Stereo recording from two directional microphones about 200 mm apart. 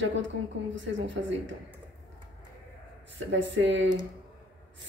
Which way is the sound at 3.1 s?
65° right (ahead or behind).